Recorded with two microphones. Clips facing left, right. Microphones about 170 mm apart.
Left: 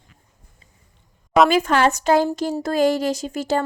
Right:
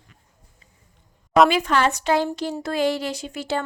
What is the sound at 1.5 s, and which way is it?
A woman's voice, 45° left (ahead or behind).